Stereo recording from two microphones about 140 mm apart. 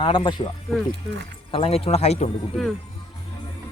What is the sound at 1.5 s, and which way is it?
Speech, 40° left (ahead or behind).